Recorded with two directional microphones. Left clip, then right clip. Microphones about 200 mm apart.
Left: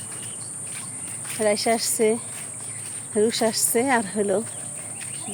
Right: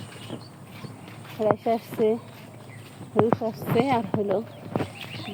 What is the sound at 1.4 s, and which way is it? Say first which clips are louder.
Speech: left 2 dB; 20° left (ahead or behind).